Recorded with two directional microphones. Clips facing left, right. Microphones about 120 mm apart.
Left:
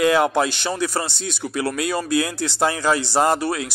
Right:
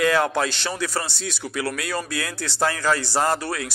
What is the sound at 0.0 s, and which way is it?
A man's voice, 15° left (ahead or behind).